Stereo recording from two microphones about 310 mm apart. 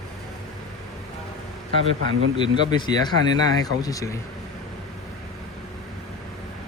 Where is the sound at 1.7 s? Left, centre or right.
Right.